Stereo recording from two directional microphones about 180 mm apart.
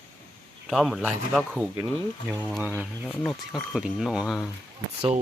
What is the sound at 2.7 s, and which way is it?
Speech, 10° left (ahead or behind).